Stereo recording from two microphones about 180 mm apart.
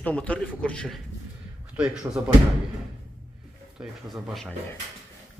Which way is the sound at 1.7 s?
5° right (ahead or behind).